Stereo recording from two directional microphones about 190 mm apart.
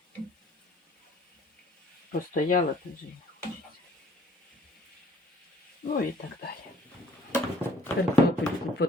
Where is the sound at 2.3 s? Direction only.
45° left (ahead or behind).